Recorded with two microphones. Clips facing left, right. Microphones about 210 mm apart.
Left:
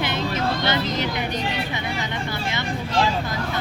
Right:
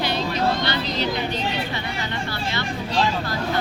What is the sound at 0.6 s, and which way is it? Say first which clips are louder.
Speech: left 1 dB; 20° left (ahead or behind).